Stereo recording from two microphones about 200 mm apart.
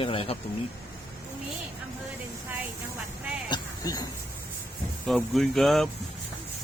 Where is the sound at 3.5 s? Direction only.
20° left (ahead or behind).